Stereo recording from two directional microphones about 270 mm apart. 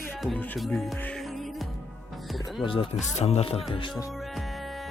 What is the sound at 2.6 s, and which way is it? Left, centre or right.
Speech, centre.